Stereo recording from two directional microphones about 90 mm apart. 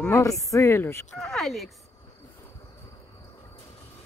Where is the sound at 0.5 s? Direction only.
25° left (ahead or behind).